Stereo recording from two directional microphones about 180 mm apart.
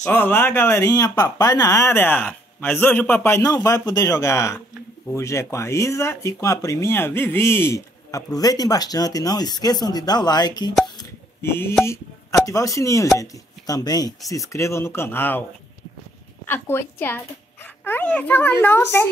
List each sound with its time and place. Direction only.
0.0 s speech: 10° left (ahead or behind)
11.0 s a sound: 15° left (ahead or behind)
12.4 s speech: 20° left (ahead or behind)
16.4 s speech: 10° left (ahead or behind)